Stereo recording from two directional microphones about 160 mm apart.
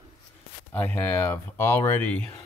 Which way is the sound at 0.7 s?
10° left (ahead or behind).